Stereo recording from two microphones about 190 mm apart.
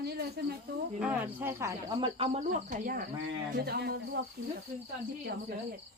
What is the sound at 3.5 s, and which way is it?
Speech, 55° right (ahead or behind).